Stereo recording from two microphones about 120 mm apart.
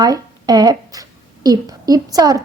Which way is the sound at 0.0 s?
30° right (ahead or behind).